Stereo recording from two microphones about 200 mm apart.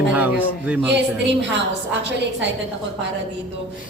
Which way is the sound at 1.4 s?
60° right (ahead or behind).